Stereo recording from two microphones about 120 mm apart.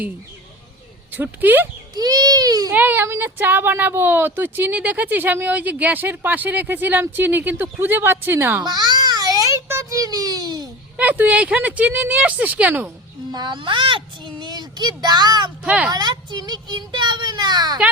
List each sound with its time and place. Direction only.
1.1 s speech: 15° right (ahead or behind)
2.0 s a child's voice: 35° right (ahead or behind)
2.7 s speech: 15° right (ahead or behind)
8.6 s a sound: 35° right (ahead or behind)
10.9 s speech: 15° right (ahead or behind)
13.3 s a child's voice: 35° right (ahead or behind)
15.6 s speech: 10° right (ahead or behind)
15.9 s a child's voice: 35° right (ahead or behind)